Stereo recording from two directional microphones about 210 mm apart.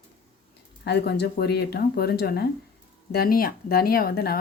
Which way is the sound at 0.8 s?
50° left (ahead or behind).